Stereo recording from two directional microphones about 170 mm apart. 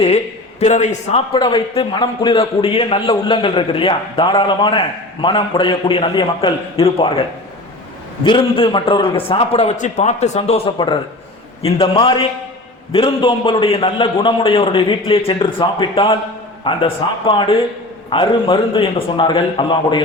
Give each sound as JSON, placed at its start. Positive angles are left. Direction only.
{"t": 0.6, "sound": "a man's voice", "side_deg": 45}
{"t": 10.8, "sound": "a man's voice", "side_deg": 30}